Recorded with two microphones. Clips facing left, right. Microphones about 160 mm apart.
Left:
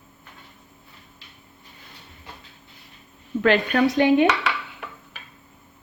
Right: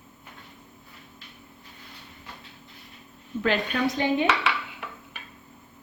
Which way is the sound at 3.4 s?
70° left (ahead or behind).